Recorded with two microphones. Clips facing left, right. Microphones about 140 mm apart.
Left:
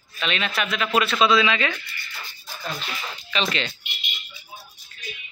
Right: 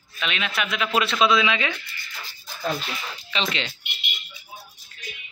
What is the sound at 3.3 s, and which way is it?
Speech, 20° right (ahead or behind).